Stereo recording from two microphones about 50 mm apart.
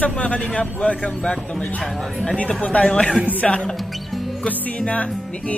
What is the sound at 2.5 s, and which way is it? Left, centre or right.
Speech, left.